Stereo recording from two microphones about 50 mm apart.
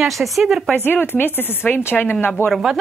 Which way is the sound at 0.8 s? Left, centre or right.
Left.